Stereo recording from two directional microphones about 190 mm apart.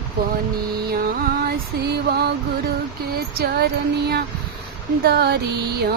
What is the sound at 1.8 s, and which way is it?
Mantra, 60° right (ahead or behind).